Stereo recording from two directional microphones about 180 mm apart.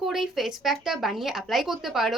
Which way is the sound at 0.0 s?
Centre (ahead or behind).